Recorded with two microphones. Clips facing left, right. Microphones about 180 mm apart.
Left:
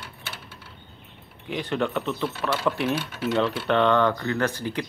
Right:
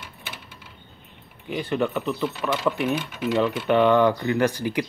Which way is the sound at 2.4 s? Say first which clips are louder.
Right 1 dB; 15° right (ahead or behind).